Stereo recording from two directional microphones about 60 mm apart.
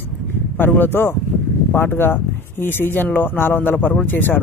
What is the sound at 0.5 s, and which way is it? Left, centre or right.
A man's voice, left.